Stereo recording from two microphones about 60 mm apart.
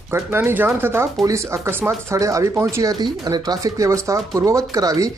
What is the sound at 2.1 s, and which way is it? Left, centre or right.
Speech, right.